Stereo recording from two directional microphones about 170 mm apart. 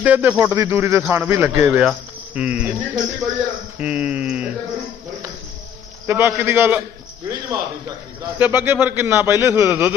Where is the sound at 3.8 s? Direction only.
5° right (ahead or behind).